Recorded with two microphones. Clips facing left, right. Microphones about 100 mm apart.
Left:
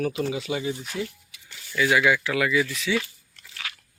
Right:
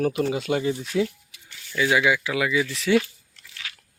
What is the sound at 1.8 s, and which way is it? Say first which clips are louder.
Speech: even; 20° right (ahead or behind).